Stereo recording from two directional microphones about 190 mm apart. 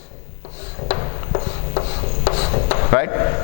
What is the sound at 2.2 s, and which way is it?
Rub, 30° left (ahead or behind).